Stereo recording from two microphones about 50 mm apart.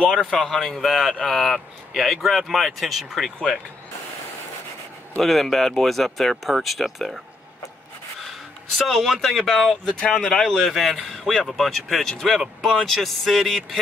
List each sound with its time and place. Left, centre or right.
0.1 s speech: centre
5.2 s speech: centre
8.2 s speech: centre
9.8 s speech: left
10.1 s speech: centre
10.7 s speech: centre